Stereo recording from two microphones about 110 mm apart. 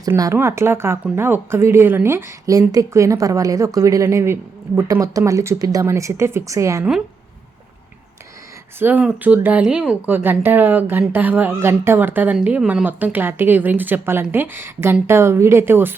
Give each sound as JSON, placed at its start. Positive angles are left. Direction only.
{"t": 0.3, "sound": "a woman's voice", "side_deg": -25}
{"t": 8.8, "sound": "a woman's voice", "side_deg": -15}